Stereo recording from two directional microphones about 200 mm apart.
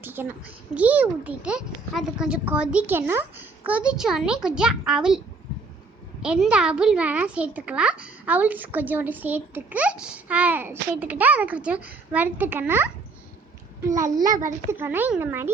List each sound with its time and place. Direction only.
0.0 s a woman's voice: 10° right (ahead or behind)
6.2 s a woman's voice: 5° right (ahead or behind)
13.8 s a woman's voice: 15° right (ahead or behind)